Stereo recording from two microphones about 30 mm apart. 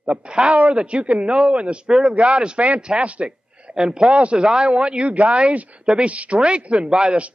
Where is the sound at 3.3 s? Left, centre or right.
Right.